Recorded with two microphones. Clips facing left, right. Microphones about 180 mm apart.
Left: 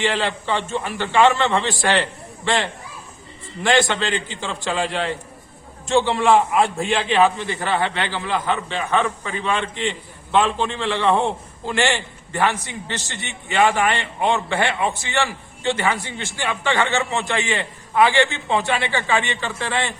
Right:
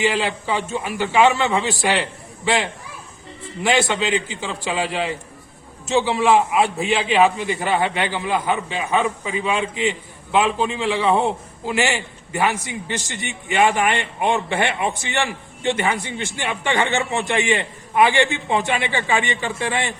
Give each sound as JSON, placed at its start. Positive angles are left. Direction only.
{"t": 0.0, "sound": "a man's voice", "side_deg": -10}